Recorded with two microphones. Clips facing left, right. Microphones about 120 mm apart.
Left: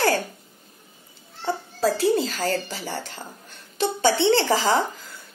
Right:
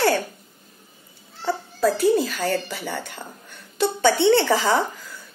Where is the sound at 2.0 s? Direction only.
25° left (ahead or behind).